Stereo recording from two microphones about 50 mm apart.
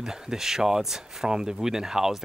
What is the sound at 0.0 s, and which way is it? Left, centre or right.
Speech, centre.